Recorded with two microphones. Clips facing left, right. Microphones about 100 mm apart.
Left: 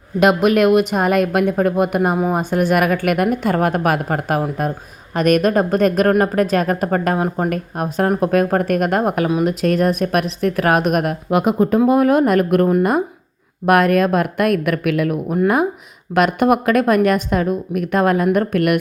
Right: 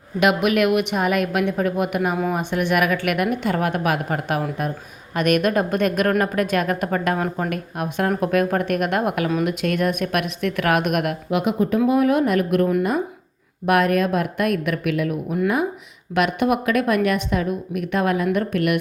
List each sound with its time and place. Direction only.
0.2 s a woman's voice: 40° left (ahead or behind); by 15.2 s 65° left (ahead or behind)
15.3 s a woman's voice: 50° left (ahead or behind)